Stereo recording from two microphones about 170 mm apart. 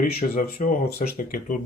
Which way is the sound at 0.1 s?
60° left (ahead or behind).